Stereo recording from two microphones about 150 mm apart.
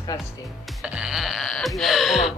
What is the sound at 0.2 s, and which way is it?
Music, 5° right (ahead or behind).